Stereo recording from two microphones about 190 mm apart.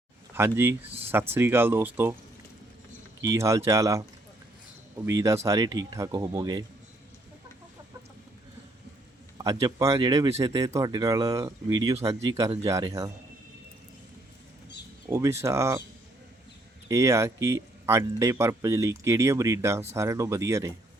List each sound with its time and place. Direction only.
0.3 s speech: 10° right (ahead or behind)
3.2 s speech: 15° right (ahead or behind)
9.4 s speech: 20° right (ahead or behind)
15.1 s speech: 15° right (ahead or behind)
16.9 s speech: 15° right (ahead or behind)